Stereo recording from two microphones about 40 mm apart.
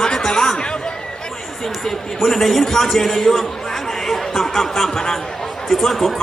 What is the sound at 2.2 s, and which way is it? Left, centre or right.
A man's voice, centre.